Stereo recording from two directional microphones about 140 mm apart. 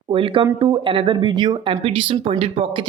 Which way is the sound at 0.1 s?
40° right (ahead or behind).